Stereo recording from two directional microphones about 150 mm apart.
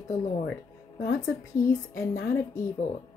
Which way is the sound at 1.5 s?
20° left (ahead or behind).